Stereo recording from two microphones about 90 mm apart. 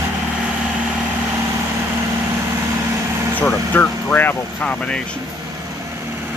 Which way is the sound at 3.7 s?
20° left (ahead or behind).